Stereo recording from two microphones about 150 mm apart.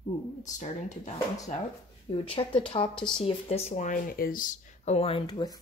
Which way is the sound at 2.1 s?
40° left (ahead or behind).